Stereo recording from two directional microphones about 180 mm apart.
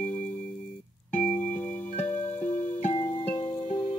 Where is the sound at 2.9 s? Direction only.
30° left (ahead or behind).